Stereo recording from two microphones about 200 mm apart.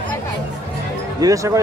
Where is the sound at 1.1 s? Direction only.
15° right (ahead or behind).